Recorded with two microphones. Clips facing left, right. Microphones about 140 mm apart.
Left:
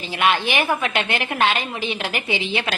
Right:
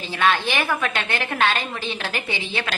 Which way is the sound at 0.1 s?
15° left (ahead or behind).